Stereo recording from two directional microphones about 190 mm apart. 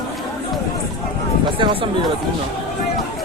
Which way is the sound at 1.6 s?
25° right (ahead or behind).